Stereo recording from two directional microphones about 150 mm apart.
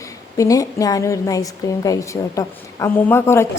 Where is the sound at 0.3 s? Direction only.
20° left (ahead or behind).